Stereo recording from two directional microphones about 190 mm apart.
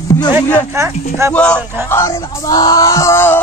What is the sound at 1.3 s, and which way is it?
Wail, 5° left (ahead or behind).